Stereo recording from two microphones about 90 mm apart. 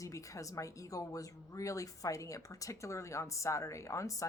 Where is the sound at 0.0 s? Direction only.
35° left (ahead or behind).